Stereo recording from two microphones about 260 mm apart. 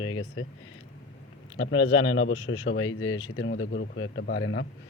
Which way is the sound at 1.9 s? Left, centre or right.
Left.